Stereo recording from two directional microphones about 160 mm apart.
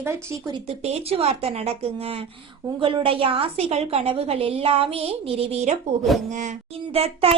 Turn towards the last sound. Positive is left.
turn(degrees=-40)  # may be behind; listen again after turning